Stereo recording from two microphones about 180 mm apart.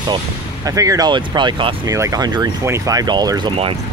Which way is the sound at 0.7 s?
20° right (ahead or behind).